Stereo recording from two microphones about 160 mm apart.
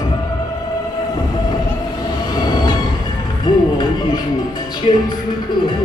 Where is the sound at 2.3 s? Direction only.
25° left (ahead or behind).